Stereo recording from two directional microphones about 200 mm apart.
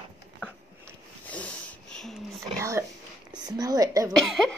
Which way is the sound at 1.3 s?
5° left (ahead or behind).